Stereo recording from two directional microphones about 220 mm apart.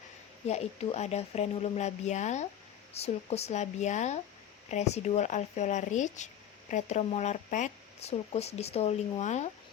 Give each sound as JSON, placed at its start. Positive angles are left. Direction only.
{"t": 0.4, "sound": "speech", "side_deg": 30}